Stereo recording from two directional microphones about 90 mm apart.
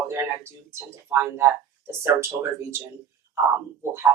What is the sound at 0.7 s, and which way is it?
Speech, 30° right (ahead or behind).